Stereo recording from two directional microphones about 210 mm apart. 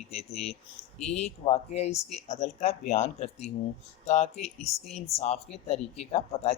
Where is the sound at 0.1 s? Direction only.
30° left (ahead or behind).